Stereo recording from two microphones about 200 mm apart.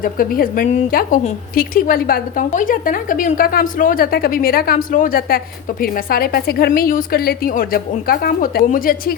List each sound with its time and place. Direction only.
0.0 s a woman's voice: 45° left (ahead or behind)